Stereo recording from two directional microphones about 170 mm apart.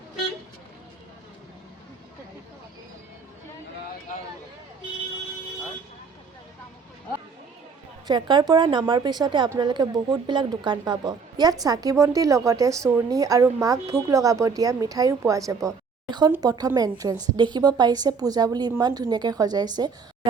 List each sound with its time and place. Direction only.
8.0 s speech: 25° right (ahead or behind)